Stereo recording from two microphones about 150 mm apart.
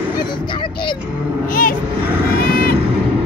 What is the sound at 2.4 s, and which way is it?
Vehicle, 80° left.